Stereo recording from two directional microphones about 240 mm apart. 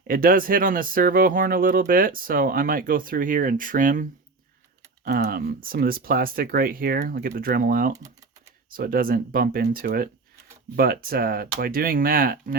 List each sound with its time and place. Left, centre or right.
0.1 s speech: right
5.0 s speech: right